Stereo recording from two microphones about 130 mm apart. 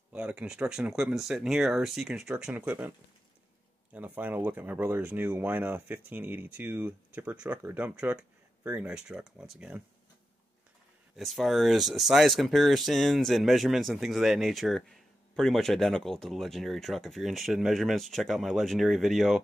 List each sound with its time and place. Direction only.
0.1 s speech: 10° right (ahead or behind)
3.9 s speech: 10° right (ahead or behind)
11.1 s speech: centre (ahead or behind)